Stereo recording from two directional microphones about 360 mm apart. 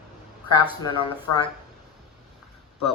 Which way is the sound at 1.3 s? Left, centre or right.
Left.